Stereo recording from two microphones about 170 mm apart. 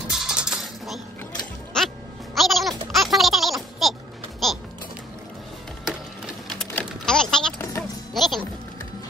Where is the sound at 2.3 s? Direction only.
Centre (ahead or behind).